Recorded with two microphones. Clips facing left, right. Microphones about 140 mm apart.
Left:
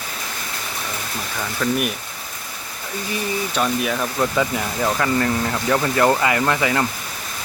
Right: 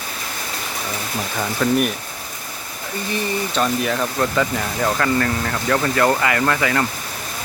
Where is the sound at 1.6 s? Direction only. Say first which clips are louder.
Right 3 dB; 5° right (ahead or behind).